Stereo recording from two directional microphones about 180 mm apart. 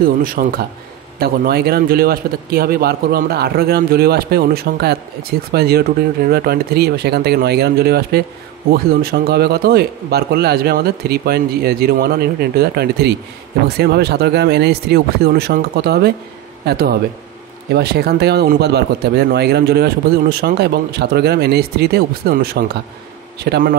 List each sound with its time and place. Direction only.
0.0 s speech: 50° right (ahead or behind)